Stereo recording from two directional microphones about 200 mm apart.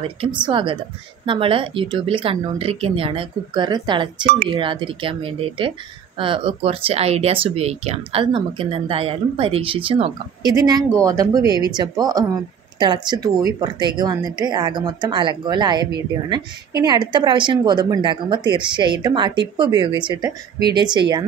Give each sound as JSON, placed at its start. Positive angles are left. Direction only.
{"t": 0.2, "sound": "speech", "side_deg": -25}